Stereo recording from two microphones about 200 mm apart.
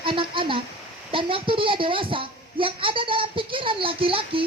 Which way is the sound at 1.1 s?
25° right (ahead or behind).